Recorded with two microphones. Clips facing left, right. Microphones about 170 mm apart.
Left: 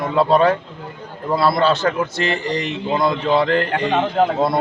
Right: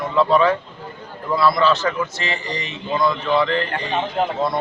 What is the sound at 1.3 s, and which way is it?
Speech, 60° left (ahead or behind).